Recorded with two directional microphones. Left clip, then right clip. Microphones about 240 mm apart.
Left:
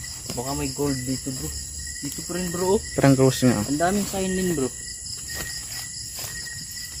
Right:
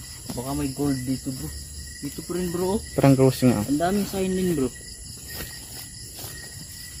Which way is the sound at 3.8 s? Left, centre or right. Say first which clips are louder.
Left 1 dB; centre.